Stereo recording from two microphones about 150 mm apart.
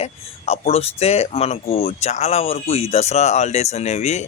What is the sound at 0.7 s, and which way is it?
Speech, 45° left (ahead or behind).